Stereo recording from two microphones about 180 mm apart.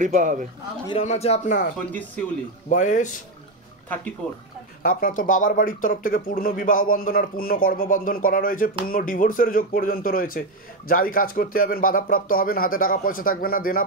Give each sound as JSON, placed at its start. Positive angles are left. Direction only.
{"t": 0.0, "sound": "a man's voice", "side_deg": -45}
{"t": 0.8, "sound": "speech", "side_deg": 35}
{"t": 1.9, "sound": "speech", "side_deg": 10}
{"t": 2.7, "sound": "speech", "side_deg": 45}
{"t": 4.8, "sound": "speech", "side_deg": 50}